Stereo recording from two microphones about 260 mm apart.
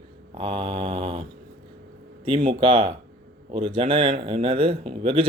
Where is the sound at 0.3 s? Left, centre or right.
Centre.